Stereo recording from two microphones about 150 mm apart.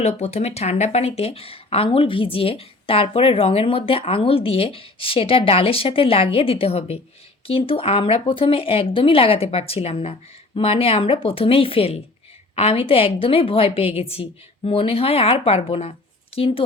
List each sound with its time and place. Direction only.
0.0 s speech: 45° left (ahead or behind)